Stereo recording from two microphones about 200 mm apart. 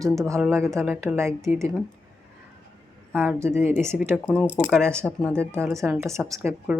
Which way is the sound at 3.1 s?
10° right (ahead or behind).